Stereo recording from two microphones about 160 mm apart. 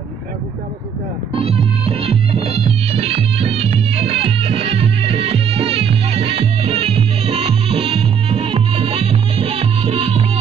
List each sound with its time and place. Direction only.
1.3 s music: 40° right (ahead or behind)